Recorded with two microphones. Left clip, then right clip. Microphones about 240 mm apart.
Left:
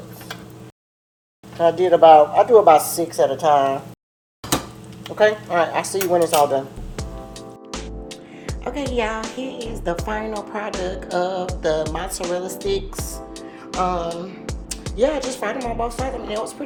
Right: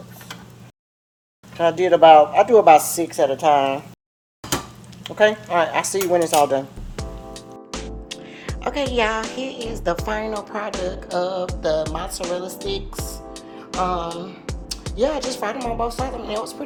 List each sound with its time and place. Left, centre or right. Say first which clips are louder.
1.5 s speech: left 1 dB; right
5.0 s speech: even; right
6.9 s music: right 3 dB; centre